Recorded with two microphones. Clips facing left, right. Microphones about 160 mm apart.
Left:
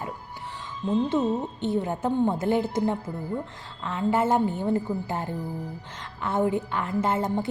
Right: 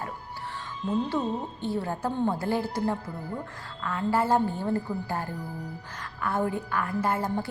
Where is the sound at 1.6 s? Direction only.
20° left (ahead or behind).